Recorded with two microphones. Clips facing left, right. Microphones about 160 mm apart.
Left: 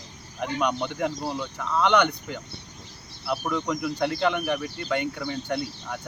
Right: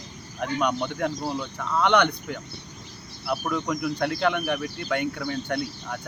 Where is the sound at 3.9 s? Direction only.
15° left (ahead or behind).